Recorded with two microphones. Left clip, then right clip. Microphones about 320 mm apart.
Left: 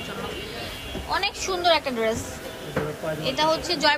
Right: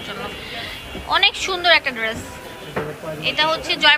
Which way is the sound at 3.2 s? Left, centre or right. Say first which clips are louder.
Right 4 dB; centre.